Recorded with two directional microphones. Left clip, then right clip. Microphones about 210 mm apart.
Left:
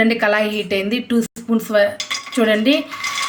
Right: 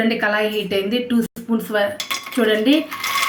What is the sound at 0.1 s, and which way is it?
A woman's voice, 55° left (ahead or behind).